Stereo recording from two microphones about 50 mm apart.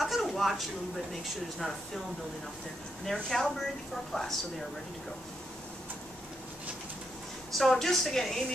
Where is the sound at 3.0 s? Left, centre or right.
Centre.